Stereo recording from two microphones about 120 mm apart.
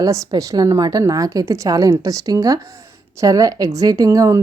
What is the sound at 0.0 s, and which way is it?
A woman's voice, 30° right (ahead or behind).